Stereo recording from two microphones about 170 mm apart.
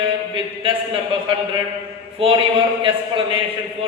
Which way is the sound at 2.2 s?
30° right (ahead or behind).